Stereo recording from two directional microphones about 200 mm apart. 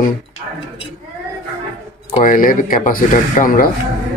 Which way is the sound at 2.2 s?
45° left (ahead or behind).